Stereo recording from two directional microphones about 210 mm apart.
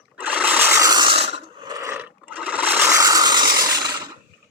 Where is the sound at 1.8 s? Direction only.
10° right (ahead or behind).